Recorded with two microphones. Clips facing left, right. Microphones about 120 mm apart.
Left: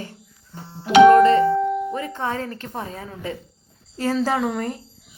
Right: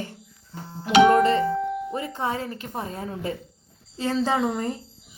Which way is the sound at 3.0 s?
40° right (ahead or behind).